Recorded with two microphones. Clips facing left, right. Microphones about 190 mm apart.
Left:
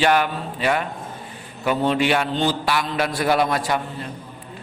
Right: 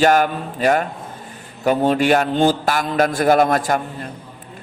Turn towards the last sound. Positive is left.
turn(degrees=-45)  # may be behind; listen again after turning